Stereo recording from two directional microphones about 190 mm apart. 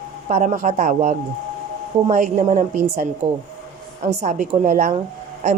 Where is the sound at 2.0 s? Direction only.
45° right (ahead or behind).